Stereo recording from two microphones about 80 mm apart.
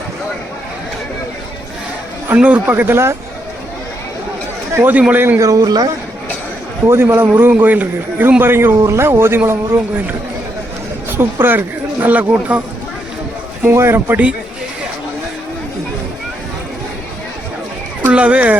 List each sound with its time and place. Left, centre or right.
2.3 s a man's voice: centre
4.7 s speech: right
4.9 s a man's voice: centre
5.4 s speech: right
6.8 s a man's voice: right
11.2 s a man's voice: right
13.6 s a man's voice: right
18.1 s speech: centre